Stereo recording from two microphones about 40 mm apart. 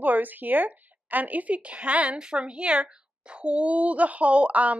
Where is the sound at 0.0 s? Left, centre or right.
Right.